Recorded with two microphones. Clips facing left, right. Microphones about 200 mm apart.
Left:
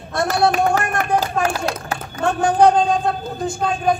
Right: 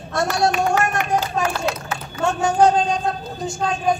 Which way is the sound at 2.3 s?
55° left (ahead or behind).